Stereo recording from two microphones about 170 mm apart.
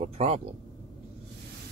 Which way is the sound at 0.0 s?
40° right (ahead or behind).